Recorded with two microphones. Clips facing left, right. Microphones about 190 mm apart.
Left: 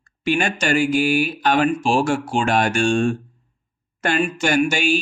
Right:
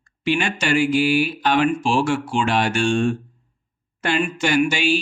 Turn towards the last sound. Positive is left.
turn(degrees=45)  # may be behind; listen again after turning